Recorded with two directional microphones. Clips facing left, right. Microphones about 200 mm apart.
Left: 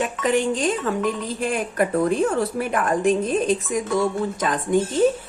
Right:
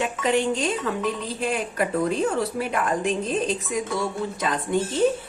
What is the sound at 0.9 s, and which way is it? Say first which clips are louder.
A woman's voice: left 3 dB; 45° left (ahead or behind).